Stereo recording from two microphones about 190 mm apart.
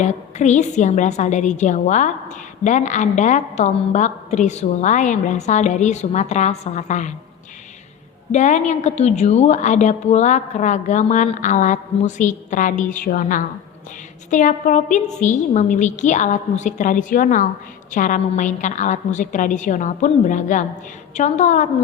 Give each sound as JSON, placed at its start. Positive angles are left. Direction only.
{"t": 0.0, "sound": "a woman's voice", "side_deg": 40}
{"t": 8.3, "sound": "a woman's voice", "side_deg": 40}